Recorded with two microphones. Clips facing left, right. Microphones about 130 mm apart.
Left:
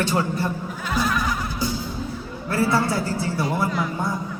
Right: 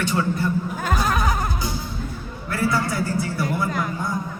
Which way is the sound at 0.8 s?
45° right (ahead or behind).